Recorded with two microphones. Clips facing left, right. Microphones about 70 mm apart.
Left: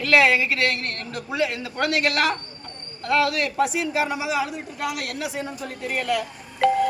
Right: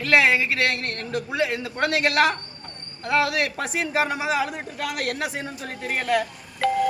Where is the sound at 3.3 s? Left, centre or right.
Right.